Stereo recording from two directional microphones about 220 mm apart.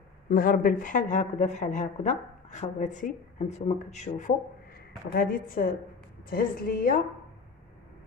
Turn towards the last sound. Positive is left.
turn(degrees=40)  # may be behind; listen again after turning